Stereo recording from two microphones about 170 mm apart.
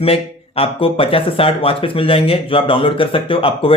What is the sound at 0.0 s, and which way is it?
Speech, 35° left (ahead or behind).